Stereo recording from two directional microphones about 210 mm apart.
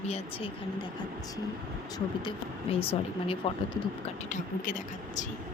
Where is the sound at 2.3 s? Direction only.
25° left (ahead or behind).